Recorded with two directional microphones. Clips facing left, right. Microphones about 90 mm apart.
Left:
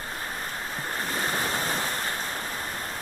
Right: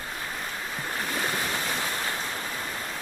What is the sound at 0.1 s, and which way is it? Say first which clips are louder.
Waves: even; 35° left (ahead or behind).